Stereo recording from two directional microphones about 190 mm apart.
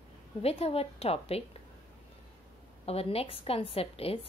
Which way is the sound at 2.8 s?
30° left (ahead or behind).